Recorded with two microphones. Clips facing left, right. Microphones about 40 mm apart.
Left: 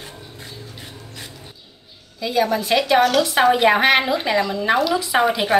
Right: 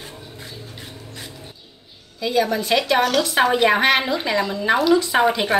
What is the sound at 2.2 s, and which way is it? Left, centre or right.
Speech, centre.